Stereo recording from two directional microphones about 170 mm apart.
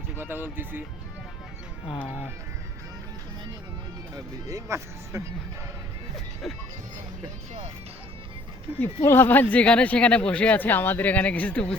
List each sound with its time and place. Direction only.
0.2 s speech: 10° right (ahead or behind)
4.1 s speech: 20° right (ahead or behind)
6.4 s speech: centre (ahead or behind)
8.8 s speech: 15° left (ahead or behind)